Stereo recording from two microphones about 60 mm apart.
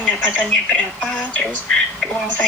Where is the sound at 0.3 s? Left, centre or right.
Left.